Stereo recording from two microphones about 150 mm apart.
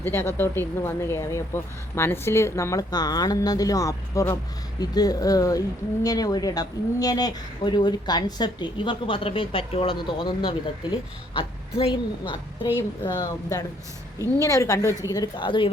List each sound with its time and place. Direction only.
0.0 s a woman's voice: 15° left (ahead or behind); by 15.7 s 35° left (ahead or behind)